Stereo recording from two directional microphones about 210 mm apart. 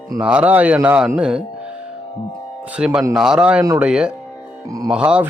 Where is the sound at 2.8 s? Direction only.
5° right (ahead or behind).